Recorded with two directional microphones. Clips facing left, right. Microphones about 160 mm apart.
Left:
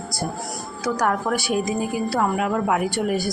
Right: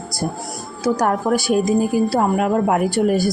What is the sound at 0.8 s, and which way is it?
A woman's voice, 35° right (ahead or behind).